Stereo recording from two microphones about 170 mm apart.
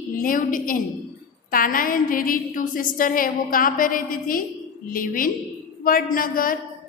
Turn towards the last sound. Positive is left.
turn(degrees=55)  # may be behind; listen again after turning